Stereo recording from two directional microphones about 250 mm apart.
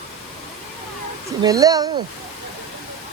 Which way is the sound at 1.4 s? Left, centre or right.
Centre.